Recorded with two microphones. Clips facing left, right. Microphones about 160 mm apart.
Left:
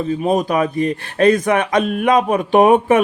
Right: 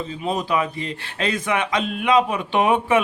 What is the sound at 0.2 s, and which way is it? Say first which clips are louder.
A man's voice: left 4 dB; 45° left (ahead or behind).